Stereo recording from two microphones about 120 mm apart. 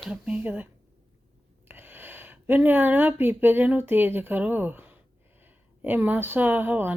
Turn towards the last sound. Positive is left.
turn(degrees=-15)  # may be behind; listen again after turning